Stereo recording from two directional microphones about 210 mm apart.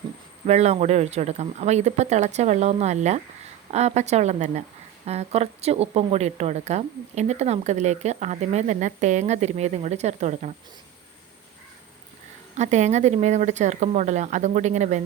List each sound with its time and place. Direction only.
0.4 s a woman's voice: 30° right (ahead or behind)
12.5 s a woman's voice: 35° right (ahead or behind)